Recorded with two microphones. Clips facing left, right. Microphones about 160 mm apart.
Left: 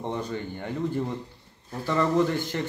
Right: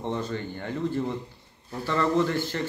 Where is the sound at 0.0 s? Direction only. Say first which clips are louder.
Right 1 dB; 15° left (ahead or behind).